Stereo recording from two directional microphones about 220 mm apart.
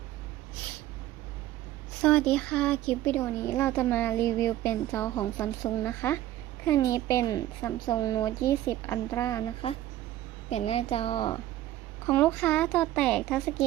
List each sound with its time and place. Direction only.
2.0 s speech: 5° left (ahead or behind)
9.6 s a woman's voice: 25° left (ahead or behind)
12.0 s speech: 10° left (ahead or behind)